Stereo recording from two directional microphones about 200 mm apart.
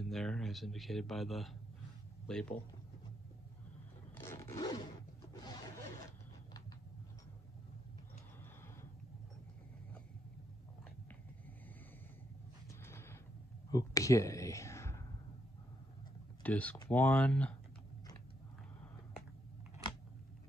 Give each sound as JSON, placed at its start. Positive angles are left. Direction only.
{"t": 0.0, "sound": "speech", "side_deg": 0}
{"t": 4.2, "sound": "zipper", "side_deg": 15}
{"t": 12.8, "sound": "a sound", "side_deg": 10}
{"t": 16.4, "sound": "speech", "side_deg": 5}